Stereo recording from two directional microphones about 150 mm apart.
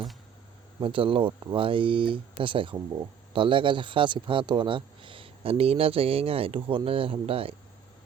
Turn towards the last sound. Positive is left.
turn(degrees=-40)  # may be behind; listen again after turning